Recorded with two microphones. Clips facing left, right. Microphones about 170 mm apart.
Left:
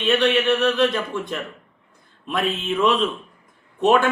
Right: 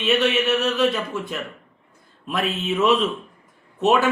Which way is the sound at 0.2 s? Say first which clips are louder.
Left 2 dB; 5° right (ahead or behind).